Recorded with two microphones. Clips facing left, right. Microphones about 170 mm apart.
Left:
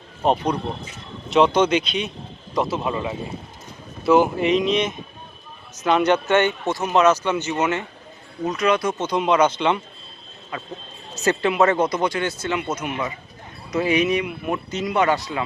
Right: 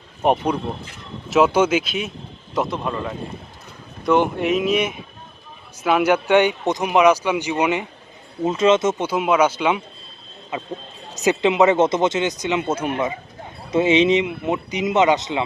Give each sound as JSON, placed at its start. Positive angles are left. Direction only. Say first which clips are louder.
{"t": 0.2, "sound": "speech", "louder": "right 1 dB", "side_deg": -10}
{"t": 8.4, "sound": "speech", "louder": "right 4 dB", "side_deg": -25}
{"t": 9.0, "sound": "speech", "louder": "left 2 dB", "side_deg": -5}
{"t": 10.5, "sound": "speech", "louder": "right 4 dB", "side_deg": -20}